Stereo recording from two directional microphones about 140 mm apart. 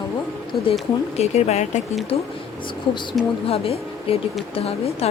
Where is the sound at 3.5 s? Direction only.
45° left (ahead or behind).